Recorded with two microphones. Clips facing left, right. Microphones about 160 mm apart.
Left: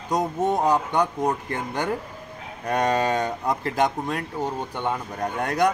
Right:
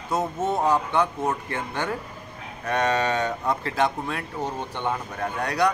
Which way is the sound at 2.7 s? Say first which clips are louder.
Left 1 dB; 40° left (ahead or behind).